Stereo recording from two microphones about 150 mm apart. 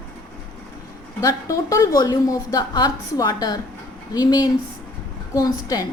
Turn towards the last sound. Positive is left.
turn(degrees=25)  # may be behind; listen again after turning